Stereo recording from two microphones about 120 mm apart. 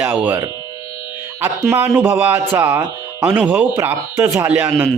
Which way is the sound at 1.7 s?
15° right (ahead or behind).